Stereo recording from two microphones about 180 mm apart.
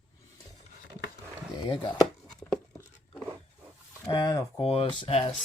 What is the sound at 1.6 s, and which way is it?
Speech, 25° left (ahead or behind).